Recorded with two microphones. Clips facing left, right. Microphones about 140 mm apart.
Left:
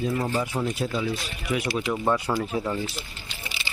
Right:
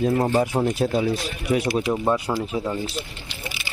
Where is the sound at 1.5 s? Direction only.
40° right (ahead or behind).